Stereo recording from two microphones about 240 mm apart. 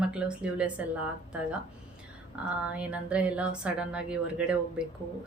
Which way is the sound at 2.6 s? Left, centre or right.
Centre.